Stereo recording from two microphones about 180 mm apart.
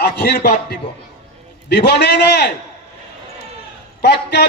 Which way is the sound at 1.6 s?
70° left (ahead or behind).